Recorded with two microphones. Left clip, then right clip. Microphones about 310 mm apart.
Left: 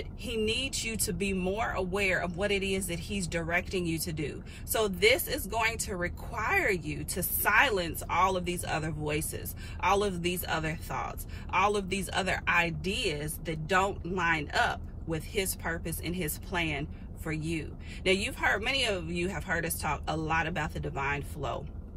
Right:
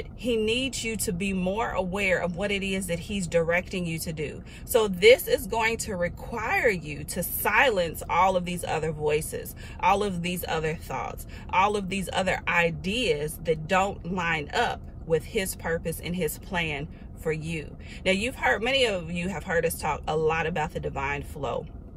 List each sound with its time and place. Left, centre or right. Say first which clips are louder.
0.2 s speech: right 5 dB; centre